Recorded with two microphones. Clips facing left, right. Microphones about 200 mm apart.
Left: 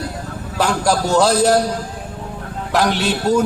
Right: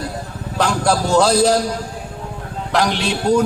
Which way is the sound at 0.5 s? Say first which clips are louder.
Even; 5° left (ahead or behind).